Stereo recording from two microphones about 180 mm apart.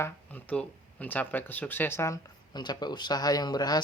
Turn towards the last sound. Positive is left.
turn(degrees=20)  # may be behind; listen again after turning